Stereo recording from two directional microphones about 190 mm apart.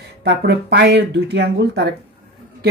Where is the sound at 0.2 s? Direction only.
65° right (ahead or behind).